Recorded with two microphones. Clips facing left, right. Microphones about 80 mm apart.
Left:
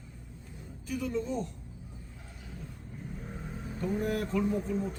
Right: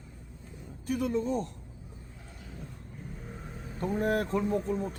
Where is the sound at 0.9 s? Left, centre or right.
Right.